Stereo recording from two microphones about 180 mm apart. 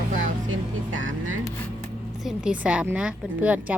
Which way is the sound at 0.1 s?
40° right (ahead or behind).